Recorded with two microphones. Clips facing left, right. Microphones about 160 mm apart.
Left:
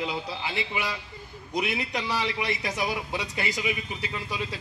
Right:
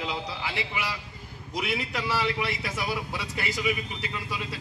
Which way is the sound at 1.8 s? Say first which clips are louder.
Even; 25° left (ahead or behind).